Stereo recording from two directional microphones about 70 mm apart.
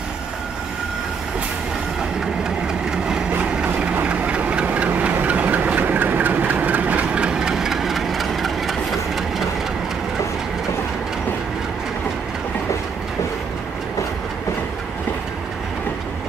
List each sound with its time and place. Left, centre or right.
2.9 s vehicle: centre
3.3 s engine: right; by 9.5 s centre